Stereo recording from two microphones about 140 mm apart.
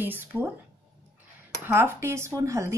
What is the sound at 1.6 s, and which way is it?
A woman's voice, 15° right (ahead or behind).